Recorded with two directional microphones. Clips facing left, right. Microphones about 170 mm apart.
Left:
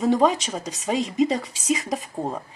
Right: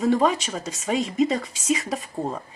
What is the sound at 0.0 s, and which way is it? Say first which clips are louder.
Speech: left 1 dB; 15° left (ahead or behind).